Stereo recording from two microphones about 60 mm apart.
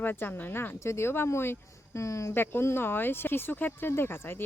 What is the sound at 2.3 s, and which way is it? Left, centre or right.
Speech, left.